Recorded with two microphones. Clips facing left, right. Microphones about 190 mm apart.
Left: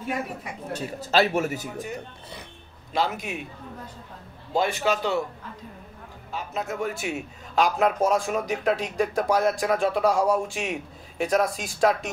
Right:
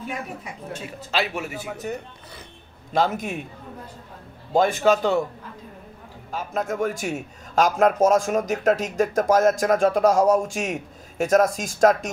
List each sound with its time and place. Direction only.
0.7 s a man's voice: 40° left (ahead or behind)
2.9 s a man's voice: 45° right (ahead or behind)
4.6 s a man's voice: 45° right (ahead or behind)
6.3 s a man's voice: 50° right (ahead or behind)